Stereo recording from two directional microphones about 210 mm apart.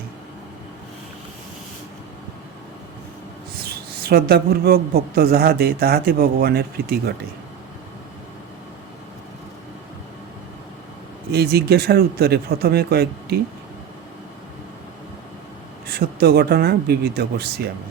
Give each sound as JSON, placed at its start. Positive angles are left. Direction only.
{"t": 3.6, "sound": "speech", "side_deg": -45}
{"t": 11.3, "sound": "speech", "side_deg": -50}
{"t": 15.9, "sound": "speech", "side_deg": -50}